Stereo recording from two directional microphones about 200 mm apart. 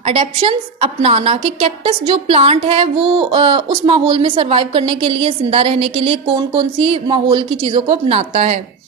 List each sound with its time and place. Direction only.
0.0 s a woman's voice: 30° right (ahead or behind)